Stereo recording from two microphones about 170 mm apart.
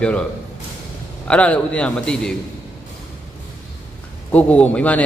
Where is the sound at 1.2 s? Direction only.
5° left (ahead or behind).